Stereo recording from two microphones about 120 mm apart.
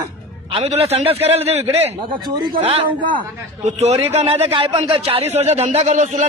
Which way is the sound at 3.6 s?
65° right (ahead or behind).